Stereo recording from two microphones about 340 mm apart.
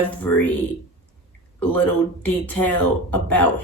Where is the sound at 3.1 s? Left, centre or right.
Centre.